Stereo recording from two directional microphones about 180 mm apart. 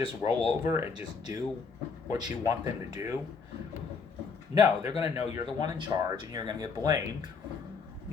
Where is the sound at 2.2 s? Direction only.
20° right (ahead or behind).